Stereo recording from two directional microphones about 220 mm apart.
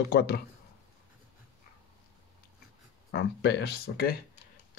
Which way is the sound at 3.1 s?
50° left (ahead or behind).